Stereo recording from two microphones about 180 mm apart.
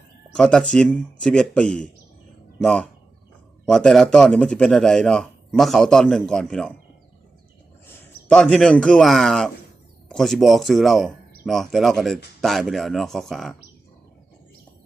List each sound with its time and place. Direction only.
0.3 s speech: 5° left (ahead or behind)
7.9 s a man's voice: 5° left (ahead or behind)